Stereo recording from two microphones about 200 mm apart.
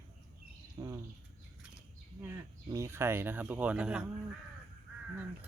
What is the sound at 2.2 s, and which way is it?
Speech, 15° right (ahead or behind).